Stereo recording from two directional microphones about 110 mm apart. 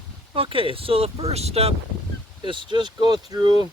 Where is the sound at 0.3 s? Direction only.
55° right (ahead or behind).